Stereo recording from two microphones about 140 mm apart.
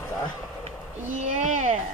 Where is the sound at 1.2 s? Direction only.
65° right (ahead or behind).